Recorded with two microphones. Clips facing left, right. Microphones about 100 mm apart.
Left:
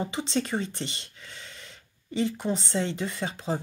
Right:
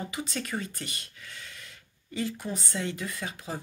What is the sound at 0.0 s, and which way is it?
Speech, 25° left (ahead or behind).